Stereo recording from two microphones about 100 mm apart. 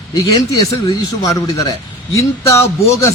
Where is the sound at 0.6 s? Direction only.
35° left (ahead or behind).